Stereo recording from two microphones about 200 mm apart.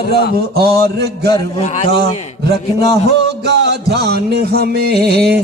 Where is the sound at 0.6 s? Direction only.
50° right (ahead or behind).